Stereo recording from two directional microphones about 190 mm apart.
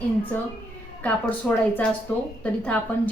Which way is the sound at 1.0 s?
10° left (ahead or behind).